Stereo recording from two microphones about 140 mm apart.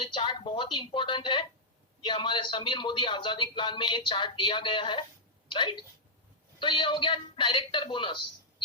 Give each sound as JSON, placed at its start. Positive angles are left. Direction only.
{"t": 0.0, "sound": "speech", "side_deg": 35}